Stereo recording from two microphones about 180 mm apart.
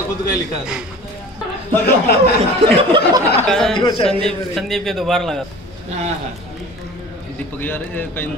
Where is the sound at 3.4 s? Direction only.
5° left (ahead or behind).